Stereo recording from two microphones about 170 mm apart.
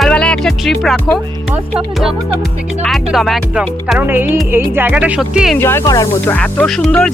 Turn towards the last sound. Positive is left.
turn(degrees=5)  # may be behind; listen again after turning